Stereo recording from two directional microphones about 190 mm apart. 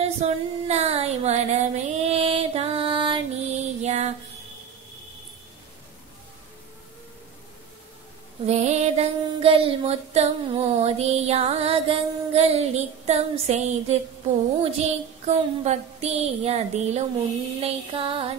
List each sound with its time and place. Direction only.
0.0 s female singing: 35° right (ahead or behind)
2.0 s music: 30° right (ahead or behind)
8.5 s female singing: 35° right (ahead or behind)
14.6 s child singing: 35° right (ahead or behind)
17.6 s music: 30° right (ahead or behind)